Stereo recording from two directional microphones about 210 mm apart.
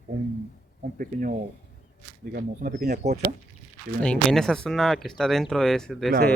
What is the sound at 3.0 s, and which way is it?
Speech, 30° right (ahead or behind).